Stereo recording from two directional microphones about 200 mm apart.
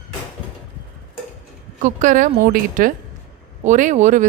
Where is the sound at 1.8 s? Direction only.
40° right (ahead or behind).